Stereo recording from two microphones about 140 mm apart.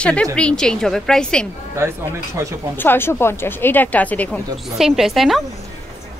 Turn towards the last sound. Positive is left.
turn(degrees=0)  # may be behind; listen again after turning